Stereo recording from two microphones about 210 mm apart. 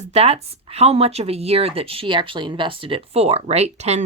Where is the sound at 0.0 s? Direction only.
30° right (ahead or behind).